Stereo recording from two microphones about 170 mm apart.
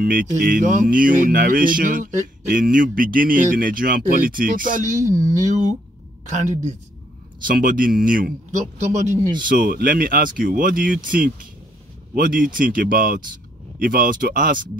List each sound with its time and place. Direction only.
0.0 s speech: 55° right (ahead or behind)
6.3 s speech: 45° right (ahead or behind)
7.4 s speech: 55° right (ahead or behind)
8.5 s speech: 45° right (ahead or behind)
9.4 s speech: 55° right (ahead or behind)